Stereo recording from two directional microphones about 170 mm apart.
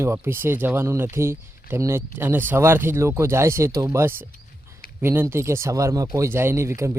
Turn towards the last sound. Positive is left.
turn(degrees=-15)  # may be behind; listen again after turning